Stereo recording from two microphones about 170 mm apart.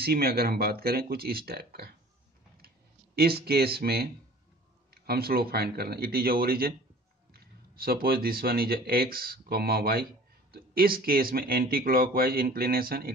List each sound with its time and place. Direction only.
0.0 s speech: 65° right (ahead or behind)
3.2 s speech: 65° right (ahead or behind)